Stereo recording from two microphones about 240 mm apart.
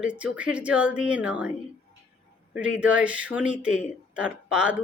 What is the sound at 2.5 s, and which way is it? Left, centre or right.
Speech, centre.